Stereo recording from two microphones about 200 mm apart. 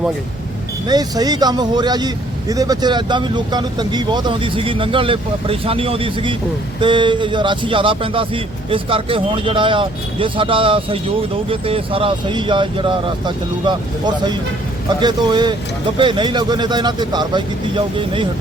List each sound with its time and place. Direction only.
0.9 s speech: 20° right (ahead or behind)
15.0 s speech: 20° right (ahead or behind)